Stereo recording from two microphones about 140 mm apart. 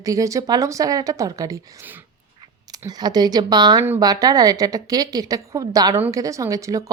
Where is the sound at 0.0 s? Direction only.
25° right (ahead or behind).